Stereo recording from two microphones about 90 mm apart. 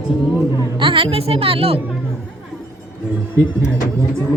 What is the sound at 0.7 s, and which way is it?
Speech, 75° right (ahead or behind).